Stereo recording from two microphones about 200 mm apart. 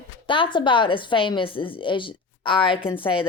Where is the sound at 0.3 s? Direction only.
25° left (ahead or behind).